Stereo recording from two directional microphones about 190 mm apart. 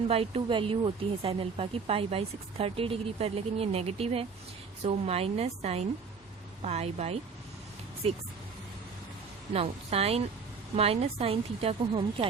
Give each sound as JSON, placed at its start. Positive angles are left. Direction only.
{"t": 0.1, "sound": "speech", "side_deg": -30}
{"t": 9.5, "sound": "speech", "side_deg": -30}